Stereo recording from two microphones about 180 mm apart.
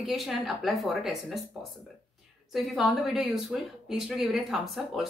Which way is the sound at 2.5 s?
Centre (ahead or behind).